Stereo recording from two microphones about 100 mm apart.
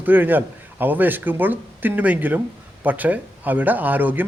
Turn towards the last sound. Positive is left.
turn(degrees=-15)  # may be behind; listen again after turning